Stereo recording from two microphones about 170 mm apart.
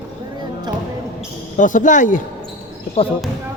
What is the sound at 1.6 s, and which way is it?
Speech, 50° left (ahead or behind).